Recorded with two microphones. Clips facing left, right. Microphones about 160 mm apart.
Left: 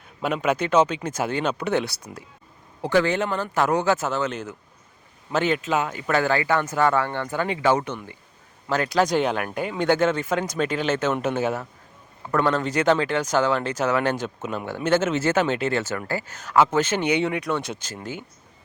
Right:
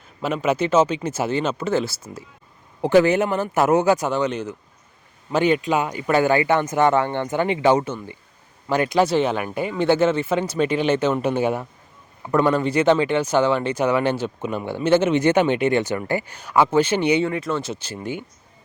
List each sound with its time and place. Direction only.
0.4 s speech: 5° right (ahead or behind)
2.8 s speech: 15° right (ahead or behind)
5.3 s speech: 10° right (ahead or behind)
9.0 s speech: 5° right (ahead or behind)
17.2 s speech: centre (ahead or behind)